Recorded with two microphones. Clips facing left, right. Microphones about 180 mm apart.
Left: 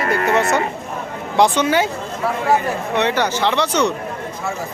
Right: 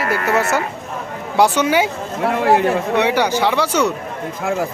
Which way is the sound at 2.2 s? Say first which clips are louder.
Right 3 dB; 70° right (ahead or behind).